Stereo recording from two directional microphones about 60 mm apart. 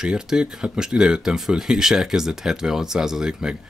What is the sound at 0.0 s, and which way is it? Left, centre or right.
Speech, centre.